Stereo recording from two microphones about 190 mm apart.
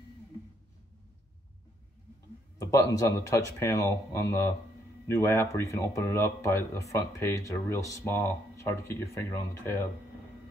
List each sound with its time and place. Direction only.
2.6 s speech: 15° left (ahead or behind)